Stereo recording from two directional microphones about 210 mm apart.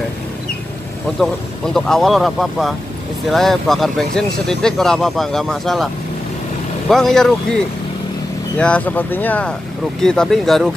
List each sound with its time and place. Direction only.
1.2 s speech: centre (ahead or behind)
6.9 s speech: centre (ahead or behind)